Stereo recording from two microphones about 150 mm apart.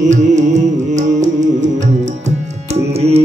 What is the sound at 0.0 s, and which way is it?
Music, 50° right (ahead or behind).